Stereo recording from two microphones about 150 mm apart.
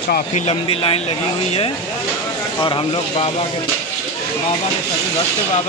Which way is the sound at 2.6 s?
35° left (ahead or behind).